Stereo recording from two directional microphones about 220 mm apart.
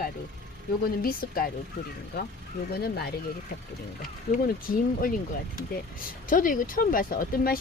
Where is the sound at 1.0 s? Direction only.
40° left (ahead or behind).